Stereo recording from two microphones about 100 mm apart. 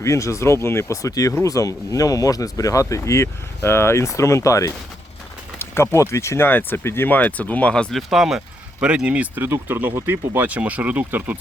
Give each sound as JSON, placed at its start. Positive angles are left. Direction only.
{"t": 0.0, "sound": "speech", "side_deg": 30}